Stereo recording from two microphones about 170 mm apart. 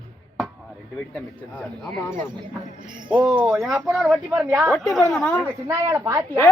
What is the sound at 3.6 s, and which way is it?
Speech, centre (ahead or behind).